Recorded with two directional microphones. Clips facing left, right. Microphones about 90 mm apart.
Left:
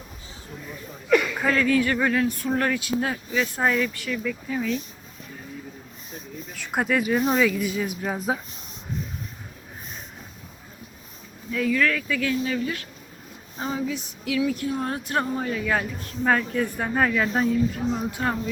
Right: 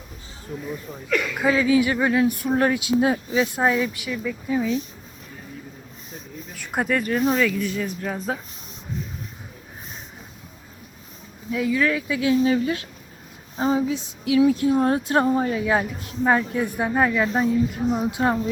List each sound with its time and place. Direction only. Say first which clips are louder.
1.4 s speech: right 3 dB; 5° right (ahead or behind)
6.5 s speech: right 1 dB; centre (ahead or behind)
11.5 s a sound: right 1 dB; 10° right (ahead or behind)